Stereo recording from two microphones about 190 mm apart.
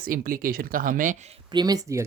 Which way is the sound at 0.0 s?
50° right (ahead or behind).